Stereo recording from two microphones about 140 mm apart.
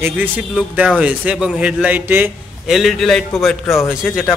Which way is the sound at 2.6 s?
Centre (ahead or behind).